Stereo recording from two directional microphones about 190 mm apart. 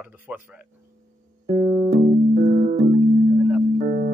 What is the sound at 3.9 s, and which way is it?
Music, 35° right (ahead or behind).